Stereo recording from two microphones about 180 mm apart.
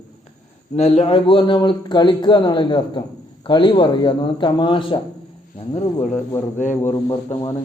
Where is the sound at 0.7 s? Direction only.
35° left (ahead or behind).